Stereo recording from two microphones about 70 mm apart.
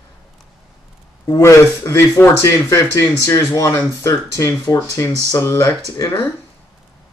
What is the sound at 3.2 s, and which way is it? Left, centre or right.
Speech, left.